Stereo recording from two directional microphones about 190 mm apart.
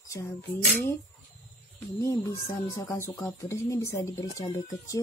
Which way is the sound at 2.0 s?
15° left (ahead or behind).